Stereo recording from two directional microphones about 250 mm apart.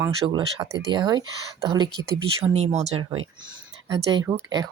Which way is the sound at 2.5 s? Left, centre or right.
Right.